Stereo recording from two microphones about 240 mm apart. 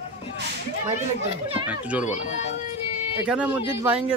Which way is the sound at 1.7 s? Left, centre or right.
Centre.